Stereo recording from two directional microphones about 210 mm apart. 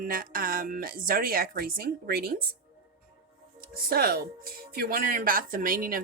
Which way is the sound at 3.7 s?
45° right (ahead or behind).